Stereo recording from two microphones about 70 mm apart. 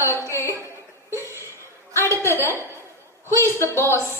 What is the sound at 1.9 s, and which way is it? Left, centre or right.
A woman's voice, left.